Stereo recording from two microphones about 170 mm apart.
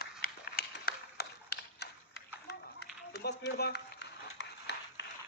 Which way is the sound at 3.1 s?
75° left (ahead or behind).